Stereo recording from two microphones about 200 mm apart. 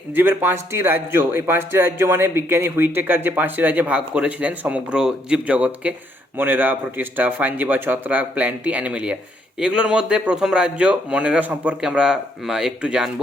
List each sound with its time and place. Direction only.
0.1 s a man's voice: 10° right (ahead or behind)